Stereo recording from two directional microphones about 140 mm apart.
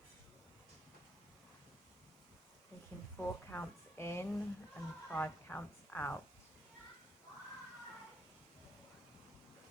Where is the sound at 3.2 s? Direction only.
15° left (ahead or behind).